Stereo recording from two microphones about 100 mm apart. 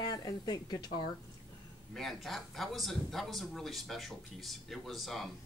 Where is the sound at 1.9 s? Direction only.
Centre (ahead or behind).